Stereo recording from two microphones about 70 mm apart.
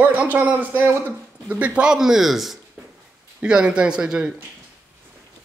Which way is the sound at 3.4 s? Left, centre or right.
Centre.